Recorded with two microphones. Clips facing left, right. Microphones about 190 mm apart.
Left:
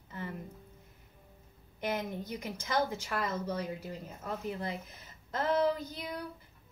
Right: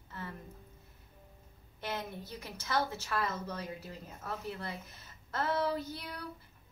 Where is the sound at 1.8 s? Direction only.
15° left (ahead or behind).